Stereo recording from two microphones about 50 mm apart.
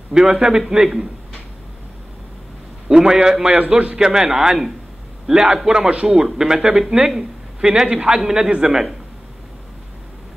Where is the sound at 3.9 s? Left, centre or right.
Centre.